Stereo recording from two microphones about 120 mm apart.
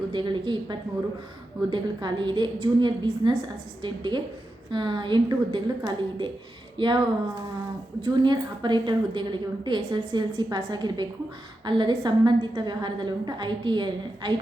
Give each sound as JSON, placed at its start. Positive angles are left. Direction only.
{"t": 0.1, "sound": "a woman's voice", "side_deg": -40}
{"t": 8.0, "sound": "a woman's voice", "side_deg": -40}